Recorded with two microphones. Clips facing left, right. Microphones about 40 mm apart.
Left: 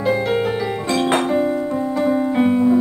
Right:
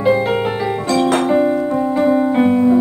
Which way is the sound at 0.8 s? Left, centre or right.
Left.